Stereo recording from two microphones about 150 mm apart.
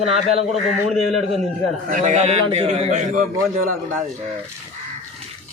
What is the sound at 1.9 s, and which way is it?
A man's voice, 60° right (ahead or behind).